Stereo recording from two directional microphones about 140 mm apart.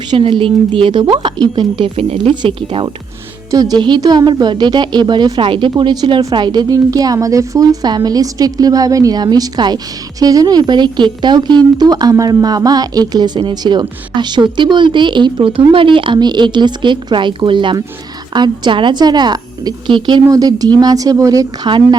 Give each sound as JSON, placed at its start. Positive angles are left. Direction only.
{"t": 0.1, "sound": "speech", "side_deg": -40}
{"t": 3.5, "sound": "speech", "side_deg": -25}